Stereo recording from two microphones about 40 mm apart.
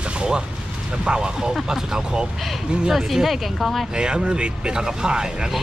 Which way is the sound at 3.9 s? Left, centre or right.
Right.